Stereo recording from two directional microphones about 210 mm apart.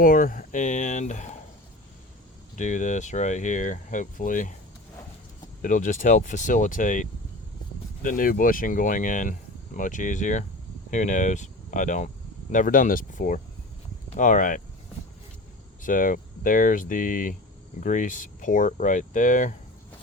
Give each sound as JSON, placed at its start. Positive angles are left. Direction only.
{"t": 0.0, "sound": "speech", "side_deg": 40}
{"t": 2.6, "sound": "speech", "side_deg": 35}
{"t": 5.6, "sound": "speech", "side_deg": 40}
{"t": 15.8, "sound": "speech", "side_deg": 40}